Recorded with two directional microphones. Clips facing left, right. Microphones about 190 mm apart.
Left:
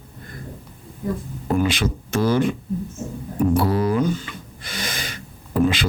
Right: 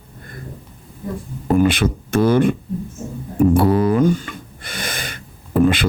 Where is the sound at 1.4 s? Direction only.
55° right (ahead or behind).